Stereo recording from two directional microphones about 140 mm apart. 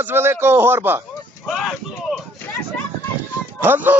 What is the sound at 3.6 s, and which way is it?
Speech, 15° right (ahead or behind).